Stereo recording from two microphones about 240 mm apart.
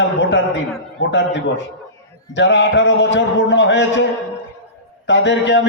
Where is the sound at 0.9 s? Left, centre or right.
Left.